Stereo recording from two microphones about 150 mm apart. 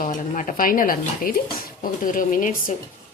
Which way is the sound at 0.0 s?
60° left (ahead or behind).